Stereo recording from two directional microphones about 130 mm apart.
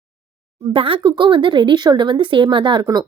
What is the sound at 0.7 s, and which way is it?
Speech, 45° right (ahead or behind).